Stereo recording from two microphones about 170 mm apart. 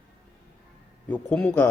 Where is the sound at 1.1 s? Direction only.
10° left (ahead or behind).